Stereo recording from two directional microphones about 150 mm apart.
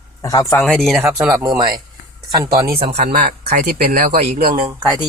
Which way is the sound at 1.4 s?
30° right (ahead or behind).